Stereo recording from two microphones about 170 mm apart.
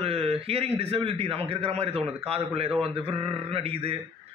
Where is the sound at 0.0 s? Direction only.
35° right (ahead or behind).